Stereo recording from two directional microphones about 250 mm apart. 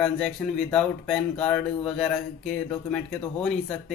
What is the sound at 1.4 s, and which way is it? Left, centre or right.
Speech, centre.